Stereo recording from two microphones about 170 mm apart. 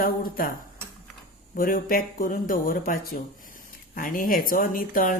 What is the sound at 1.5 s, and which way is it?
Speech, 60° left (ahead or behind).